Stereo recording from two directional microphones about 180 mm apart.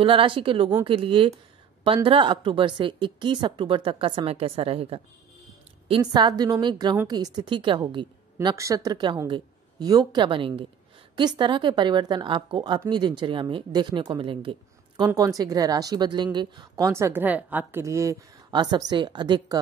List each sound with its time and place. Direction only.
0.0 s a woman's voice: 30° right (ahead or behind)